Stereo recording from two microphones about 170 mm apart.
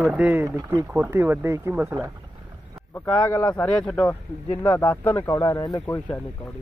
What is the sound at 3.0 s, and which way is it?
Speech, 25° left (ahead or behind).